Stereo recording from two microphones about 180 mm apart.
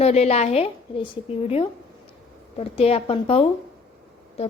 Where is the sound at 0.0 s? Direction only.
35° left (ahead or behind).